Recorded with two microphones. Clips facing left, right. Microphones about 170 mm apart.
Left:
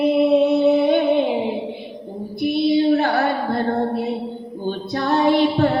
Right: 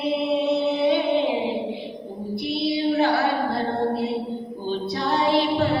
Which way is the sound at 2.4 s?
50° left (ahead or behind).